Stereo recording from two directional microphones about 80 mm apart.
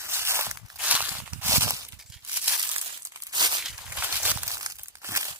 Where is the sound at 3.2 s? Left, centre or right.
Right.